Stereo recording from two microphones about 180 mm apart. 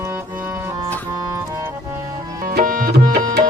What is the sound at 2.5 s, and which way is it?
Tabla, 50° right (ahead or behind).